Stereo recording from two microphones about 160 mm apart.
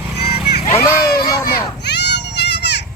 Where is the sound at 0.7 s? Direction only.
15° left (ahead or behind).